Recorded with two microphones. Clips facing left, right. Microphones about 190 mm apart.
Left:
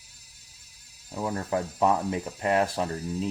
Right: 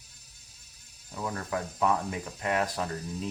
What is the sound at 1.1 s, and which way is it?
Speech, 35° left (ahead or behind).